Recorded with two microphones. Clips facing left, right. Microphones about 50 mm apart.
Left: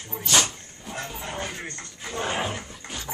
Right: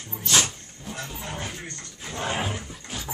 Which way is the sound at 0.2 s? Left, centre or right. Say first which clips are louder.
Left 1 dB; centre.